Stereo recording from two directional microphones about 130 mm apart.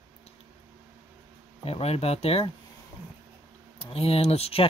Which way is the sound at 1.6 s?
50° left (ahead or behind).